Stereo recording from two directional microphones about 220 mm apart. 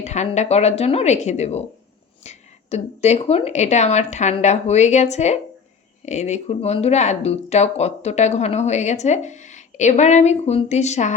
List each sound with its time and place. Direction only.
0.0 s speech: 30° left (ahead or behind)